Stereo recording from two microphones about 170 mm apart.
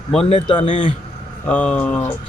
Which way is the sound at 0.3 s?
35° left (ahead or behind).